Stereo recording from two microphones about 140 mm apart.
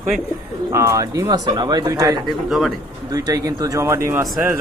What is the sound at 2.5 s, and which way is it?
Speech, centre (ahead or behind).